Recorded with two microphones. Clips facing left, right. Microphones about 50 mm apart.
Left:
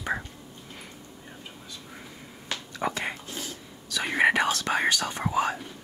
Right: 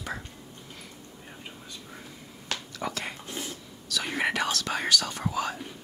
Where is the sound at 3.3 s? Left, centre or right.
Right.